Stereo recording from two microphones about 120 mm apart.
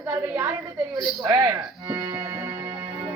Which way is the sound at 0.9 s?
25° right (ahead or behind).